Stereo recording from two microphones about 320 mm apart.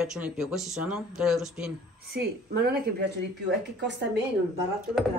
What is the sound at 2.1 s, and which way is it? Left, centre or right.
A woman's voice, right.